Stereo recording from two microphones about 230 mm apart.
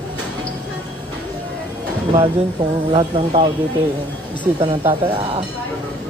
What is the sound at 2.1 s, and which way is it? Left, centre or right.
Speech, right.